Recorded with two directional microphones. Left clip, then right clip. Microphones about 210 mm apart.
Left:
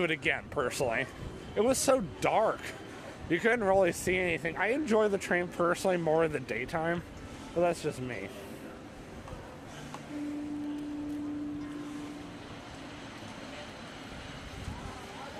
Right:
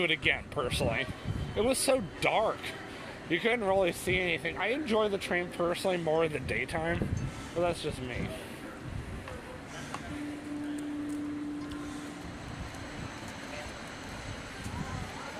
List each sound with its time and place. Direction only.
0.0 s speech: 25° left (ahead or behind)
7.6 s speech: 30° left (ahead or behind)